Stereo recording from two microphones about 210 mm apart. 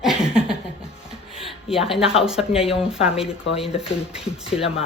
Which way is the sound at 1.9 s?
Centre (ahead or behind).